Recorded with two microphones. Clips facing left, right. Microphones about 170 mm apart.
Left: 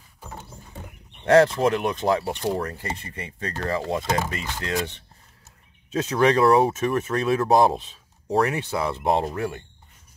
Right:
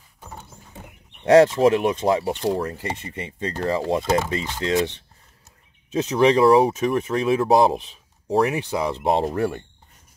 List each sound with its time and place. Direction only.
1.2 s speech: 20° right (ahead or behind)
5.9 s speech: 15° right (ahead or behind)
9.3 s speech: 35° right (ahead or behind)